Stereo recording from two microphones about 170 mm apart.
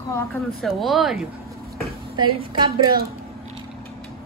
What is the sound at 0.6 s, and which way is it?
Speech, centre (ahead or behind).